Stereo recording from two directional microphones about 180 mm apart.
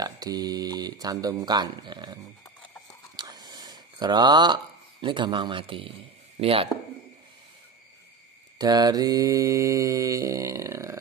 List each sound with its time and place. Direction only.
0.0 s speech: 20° right (ahead or behind)
3.2 s a sound: 25° right (ahead or behind)
5.0 s a man's voice: 25° right (ahead or behind)
8.5 s mantra: 20° right (ahead or behind)